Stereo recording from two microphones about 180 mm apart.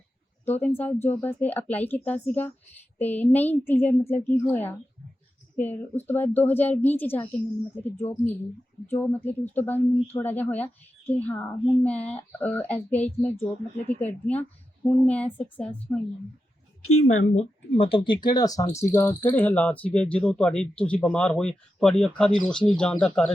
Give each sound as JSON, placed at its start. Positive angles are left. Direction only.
{"t": 0.4, "sound": "speech", "side_deg": 10}
{"t": 17.1, "sound": "speech", "side_deg": 90}
{"t": 17.7, "sound": "speech", "side_deg": 30}